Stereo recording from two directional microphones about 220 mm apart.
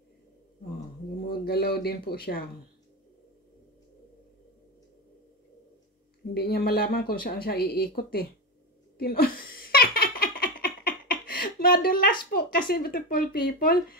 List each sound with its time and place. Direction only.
1.2 s speech: 45° left (ahead or behind)
6.3 s speech: 45° left (ahead or behind)
8.9 s giggle: 45° left (ahead or behind)